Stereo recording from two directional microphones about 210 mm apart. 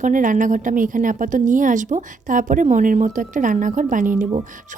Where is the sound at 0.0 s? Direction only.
40° right (ahead or behind).